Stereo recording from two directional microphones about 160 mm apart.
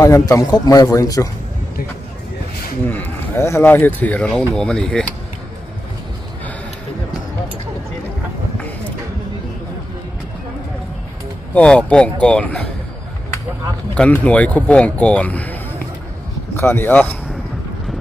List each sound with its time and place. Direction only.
0.0 s a man's voice: 20° left (ahead or behind)
2.9 s speech: 15° left (ahead or behind)
11.5 s speech: 5° left (ahead or behind)
13.9 s speech: 10° left (ahead or behind)